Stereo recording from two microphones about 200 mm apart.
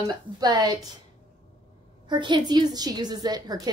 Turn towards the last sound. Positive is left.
turn(degrees=-20)  # may be behind; listen again after turning